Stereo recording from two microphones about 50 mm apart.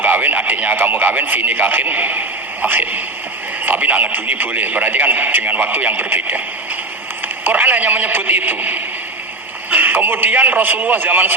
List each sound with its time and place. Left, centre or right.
0.0 s radio: right
0.8 s speech: right
7.4 s speech: right